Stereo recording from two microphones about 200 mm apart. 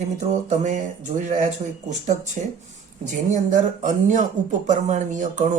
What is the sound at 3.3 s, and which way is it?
Speech, 40° right (ahead or behind).